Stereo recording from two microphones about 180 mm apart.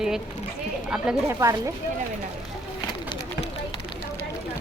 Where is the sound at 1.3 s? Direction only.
15° right (ahead or behind).